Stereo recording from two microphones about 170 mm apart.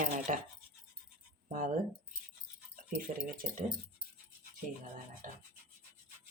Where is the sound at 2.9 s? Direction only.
55° right (ahead or behind).